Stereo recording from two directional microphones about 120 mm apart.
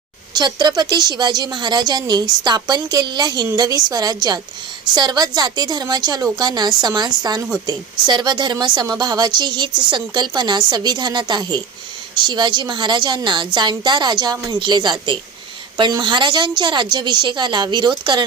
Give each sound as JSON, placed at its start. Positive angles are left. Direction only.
{"t": 0.3, "sound": "a woman's voice", "side_deg": -35}